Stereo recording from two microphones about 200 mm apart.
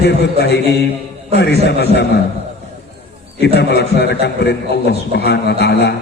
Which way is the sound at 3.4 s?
55° left (ahead or behind).